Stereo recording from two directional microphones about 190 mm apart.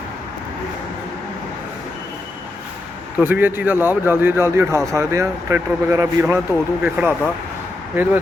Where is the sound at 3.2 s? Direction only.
10° right (ahead or behind).